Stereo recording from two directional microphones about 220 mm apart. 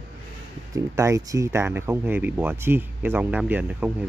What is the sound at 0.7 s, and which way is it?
Speech, 15° right (ahead or behind).